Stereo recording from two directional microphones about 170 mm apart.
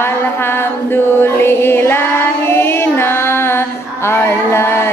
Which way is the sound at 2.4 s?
15° left (ahead or behind).